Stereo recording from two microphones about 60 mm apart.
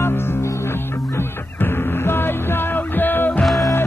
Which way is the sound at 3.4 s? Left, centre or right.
Centre.